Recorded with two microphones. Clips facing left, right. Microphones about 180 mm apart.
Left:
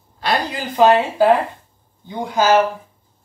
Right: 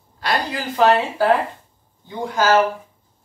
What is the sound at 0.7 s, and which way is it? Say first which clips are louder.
Speech: left 3 dB; 20° left (ahead or behind).